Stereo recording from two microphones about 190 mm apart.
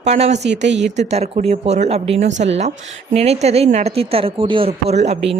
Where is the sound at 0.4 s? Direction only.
65° right (ahead or behind).